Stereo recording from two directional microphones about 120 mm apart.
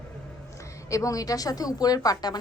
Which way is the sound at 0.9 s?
25° left (ahead or behind).